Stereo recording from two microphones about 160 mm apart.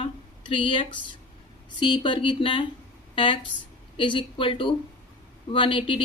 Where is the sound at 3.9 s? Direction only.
30° left (ahead or behind).